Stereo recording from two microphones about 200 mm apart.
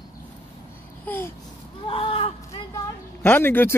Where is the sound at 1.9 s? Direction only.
30° left (ahead or behind).